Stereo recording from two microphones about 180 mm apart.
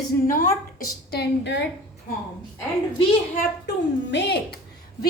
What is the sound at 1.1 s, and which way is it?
Speech, 70° left (ahead or behind).